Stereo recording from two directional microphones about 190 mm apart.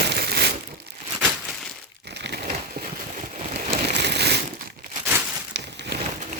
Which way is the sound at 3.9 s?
60° right (ahead or behind).